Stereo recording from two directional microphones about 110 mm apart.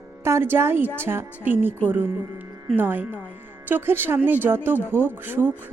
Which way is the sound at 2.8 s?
20° right (ahead or behind).